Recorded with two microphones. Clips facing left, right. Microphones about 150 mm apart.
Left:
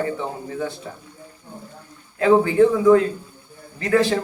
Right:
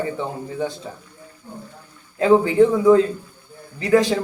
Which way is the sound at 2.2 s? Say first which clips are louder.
Right 1 dB; 20° right (ahead or behind).